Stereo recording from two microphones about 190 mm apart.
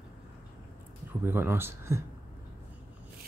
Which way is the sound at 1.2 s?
10° right (ahead or behind).